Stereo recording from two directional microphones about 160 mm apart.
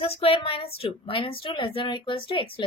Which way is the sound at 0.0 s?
35° left (ahead or behind).